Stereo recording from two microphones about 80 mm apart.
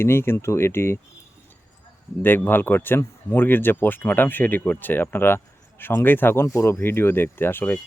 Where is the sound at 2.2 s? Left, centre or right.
Left.